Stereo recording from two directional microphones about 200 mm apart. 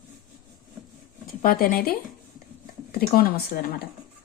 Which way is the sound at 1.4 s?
45° left (ahead or behind).